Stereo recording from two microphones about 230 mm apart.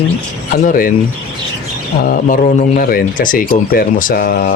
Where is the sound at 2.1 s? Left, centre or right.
Left.